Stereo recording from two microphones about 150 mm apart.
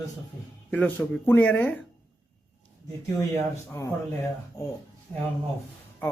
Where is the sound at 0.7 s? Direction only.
10° left (ahead or behind).